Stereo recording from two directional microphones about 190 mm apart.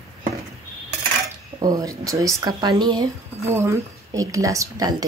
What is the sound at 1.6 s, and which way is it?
Speech, 20° right (ahead or behind).